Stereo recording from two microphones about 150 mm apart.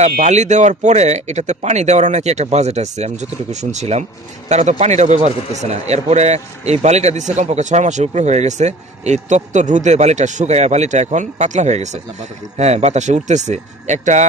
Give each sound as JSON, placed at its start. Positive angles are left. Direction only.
{"t": 0.2, "sound": "a man's voice", "side_deg": -50}